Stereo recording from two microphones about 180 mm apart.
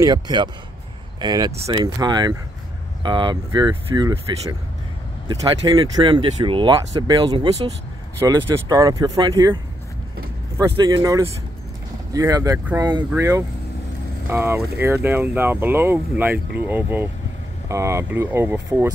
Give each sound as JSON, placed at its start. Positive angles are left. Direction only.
{"t": 0.0, "sound": "speech", "side_deg": -25}
{"t": 10.8, "sound": "speech", "side_deg": -20}